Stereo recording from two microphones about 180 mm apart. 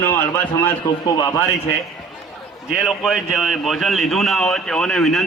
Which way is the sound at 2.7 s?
Centre (ahead or behind).